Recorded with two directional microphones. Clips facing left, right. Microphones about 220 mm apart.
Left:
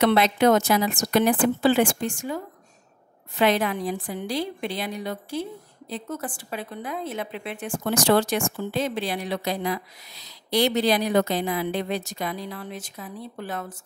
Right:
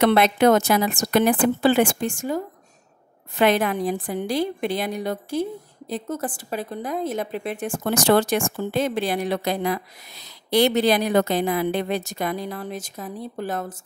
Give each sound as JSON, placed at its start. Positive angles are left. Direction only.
{"t": 0.0, "sound": "a woman's voice", "side_deg": -55}